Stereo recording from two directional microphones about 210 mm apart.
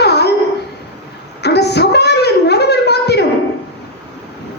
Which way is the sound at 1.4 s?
50° left (ahead or behind).